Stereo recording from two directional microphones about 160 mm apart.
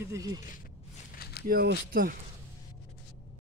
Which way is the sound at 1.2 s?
85° left.